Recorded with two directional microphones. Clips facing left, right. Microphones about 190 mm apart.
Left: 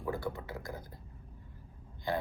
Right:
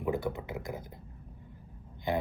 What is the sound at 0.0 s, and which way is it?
Speech, 20° right (ahead or behind).